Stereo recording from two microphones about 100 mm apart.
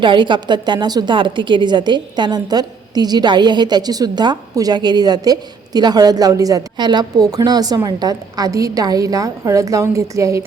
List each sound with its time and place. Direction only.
0.0 s a woman's voice: 55° right (ahead or behind); by 10.4 s 30° right (ahead or behind)